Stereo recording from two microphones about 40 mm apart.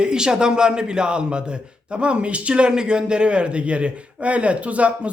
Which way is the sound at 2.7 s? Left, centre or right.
Centre.